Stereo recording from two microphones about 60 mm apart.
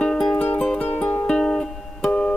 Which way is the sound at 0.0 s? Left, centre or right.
Centre.